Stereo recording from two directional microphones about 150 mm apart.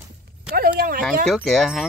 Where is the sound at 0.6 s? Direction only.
70° right (ahead or behind).